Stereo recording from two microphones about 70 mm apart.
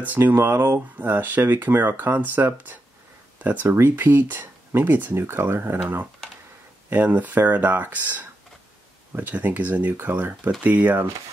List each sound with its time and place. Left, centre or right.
0.0 s speech: right